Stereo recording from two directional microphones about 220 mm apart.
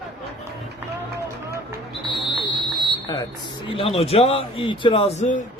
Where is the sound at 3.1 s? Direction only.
20° left (ahead or behind).